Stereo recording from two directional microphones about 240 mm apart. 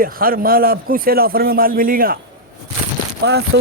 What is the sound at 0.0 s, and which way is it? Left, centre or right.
Speech, right.